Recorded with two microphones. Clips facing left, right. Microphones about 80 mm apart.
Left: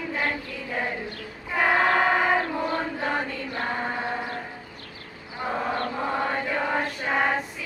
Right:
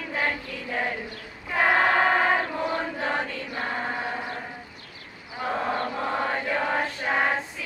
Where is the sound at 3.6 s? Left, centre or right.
Centre.